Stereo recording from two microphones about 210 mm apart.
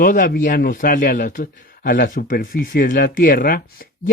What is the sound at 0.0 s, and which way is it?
A man's voice, 40° left (ahead or behind).